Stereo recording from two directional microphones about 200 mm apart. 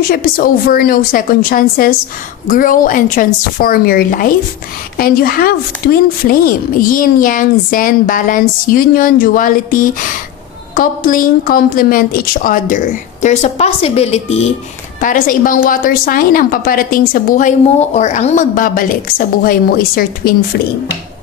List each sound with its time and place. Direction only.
0.1 s speech: 45° left (ahead or behind)
15.0 s speech: 45° left (ahead or behind)